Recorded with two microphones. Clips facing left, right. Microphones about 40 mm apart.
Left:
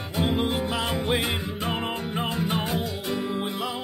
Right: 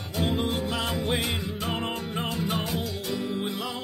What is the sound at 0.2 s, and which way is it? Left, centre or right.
Music, centre.